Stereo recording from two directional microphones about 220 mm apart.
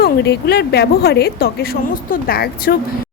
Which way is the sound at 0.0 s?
45° left (ahead or behind).